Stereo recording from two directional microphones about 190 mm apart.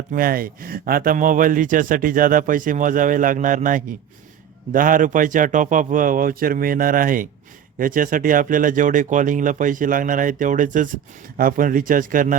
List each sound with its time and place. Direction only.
0.1 s speech: 50° right (ahead or behind)